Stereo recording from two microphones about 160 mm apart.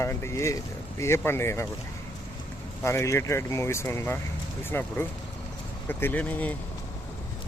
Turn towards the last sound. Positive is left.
turn(degrees=10)  # may be behind; listen again after turning